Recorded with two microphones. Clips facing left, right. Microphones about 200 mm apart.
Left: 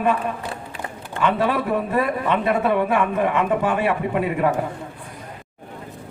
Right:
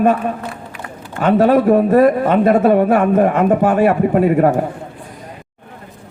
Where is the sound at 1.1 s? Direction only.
45° right (ahead or behind).